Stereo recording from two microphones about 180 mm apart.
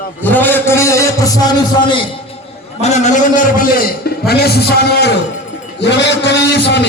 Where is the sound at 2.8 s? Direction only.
40° left (ahead or behind).